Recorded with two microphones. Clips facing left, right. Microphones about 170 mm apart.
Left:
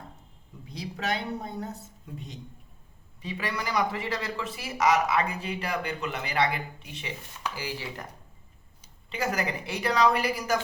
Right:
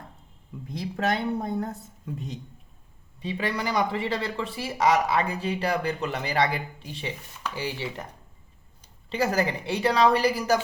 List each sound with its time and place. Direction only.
0.7 s a woman's voice: 50° right (ahead or behind)
3.2 s speech: 25° right (ahead or behind)
9.0 s speech: 35° right (ahead or behind)